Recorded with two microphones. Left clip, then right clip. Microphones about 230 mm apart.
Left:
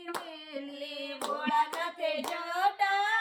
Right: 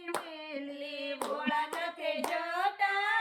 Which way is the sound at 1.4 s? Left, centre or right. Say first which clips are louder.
Left 6 dB; centre.